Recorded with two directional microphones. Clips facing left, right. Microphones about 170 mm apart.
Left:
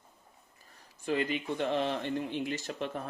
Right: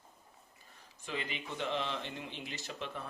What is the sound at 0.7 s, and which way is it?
A man's voice, 45° left (ahead or behind).